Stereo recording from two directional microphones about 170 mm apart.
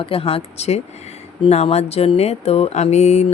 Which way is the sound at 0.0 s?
35° left (ahead or behind).